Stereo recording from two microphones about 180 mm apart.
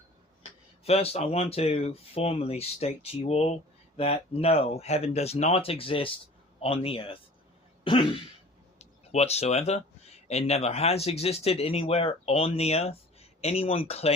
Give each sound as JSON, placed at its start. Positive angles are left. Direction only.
{"t": 0.9, "sound": "speech", "side_deg": 35}
{"t": 7.9, "sound": "throat clearing", "side_deg": 30}
{"t": 8.8, "sound": "speech", "side_deg": 35}